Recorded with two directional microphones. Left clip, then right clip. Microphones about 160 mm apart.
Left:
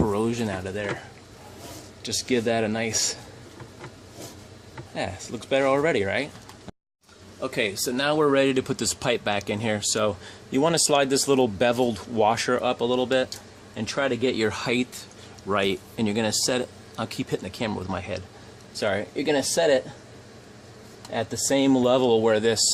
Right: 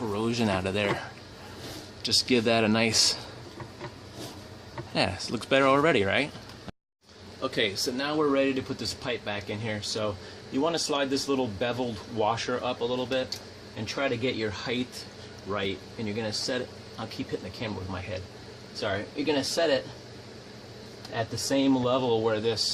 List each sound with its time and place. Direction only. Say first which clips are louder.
0.1 s a sound: left 5 dB; 25° left (ahead or behind)
0.3 s speech: right 2 dB; centre (ahead or behind)
2.0 s speech: right 1 dB; 10° left (ahead or behind)
4.9 s speech: right 3 dB; 5° right (ahead or behind)
7.4 s speech: left 1 dB; 35° left (ahead or behind)
7.9 s speech: left 6 dB; 55° left (ahead or behind)
21.5 s speech: left 5 dB; 60° left (ahead or behind)